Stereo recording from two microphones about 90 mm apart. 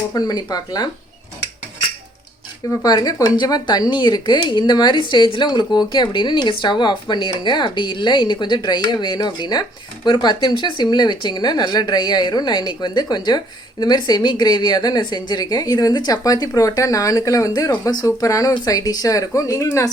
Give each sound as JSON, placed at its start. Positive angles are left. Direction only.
{"t": 0.1, "sound": "speech", "side_deg": 50}
{"t": 2.8, "sound": "speech", "side_deg": 45}